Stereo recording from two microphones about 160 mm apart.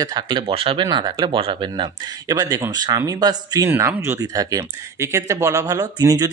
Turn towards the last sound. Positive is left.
turn(degrees=-25)  # may be behind; listen again after turning